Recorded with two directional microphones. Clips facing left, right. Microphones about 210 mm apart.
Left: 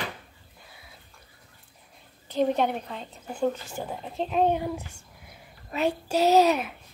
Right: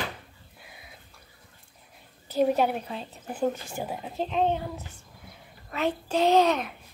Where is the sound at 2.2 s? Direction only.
5° right (ahead or behind).